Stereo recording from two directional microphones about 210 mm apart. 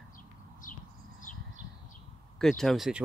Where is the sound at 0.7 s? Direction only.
40° left (ahead or behind).